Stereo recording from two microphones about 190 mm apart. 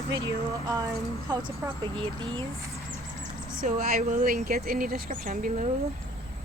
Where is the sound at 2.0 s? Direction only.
25° right (ahead or behind).